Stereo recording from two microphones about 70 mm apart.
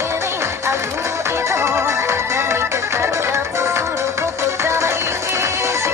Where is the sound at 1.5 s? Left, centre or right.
Right.